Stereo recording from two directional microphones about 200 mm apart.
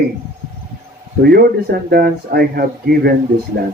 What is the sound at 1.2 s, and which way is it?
Speech, 50° right (ahead or behind).